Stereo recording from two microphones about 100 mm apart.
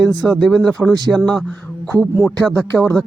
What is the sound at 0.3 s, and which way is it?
Speech, 5° left (ahead or behind).